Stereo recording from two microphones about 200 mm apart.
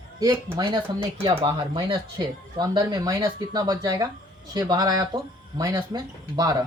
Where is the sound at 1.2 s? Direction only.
25° right (ahead or behind).